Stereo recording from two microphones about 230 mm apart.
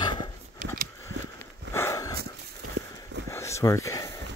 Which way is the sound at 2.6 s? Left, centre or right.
Right.